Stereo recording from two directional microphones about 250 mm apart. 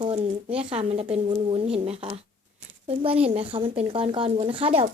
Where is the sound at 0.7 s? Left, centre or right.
Right.